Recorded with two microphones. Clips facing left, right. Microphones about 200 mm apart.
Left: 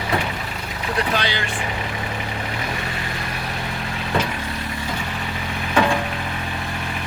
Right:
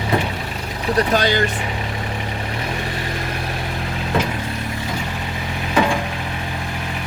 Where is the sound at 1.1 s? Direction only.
45° right (ahead or behind).